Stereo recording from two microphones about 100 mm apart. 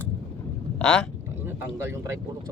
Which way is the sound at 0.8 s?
10° left (ahead or behind).